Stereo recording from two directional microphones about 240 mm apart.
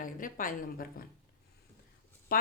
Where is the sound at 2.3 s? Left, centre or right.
Left.